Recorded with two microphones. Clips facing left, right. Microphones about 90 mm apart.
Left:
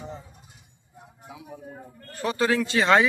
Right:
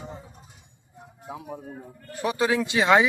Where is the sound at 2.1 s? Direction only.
15° right (ahead or behind).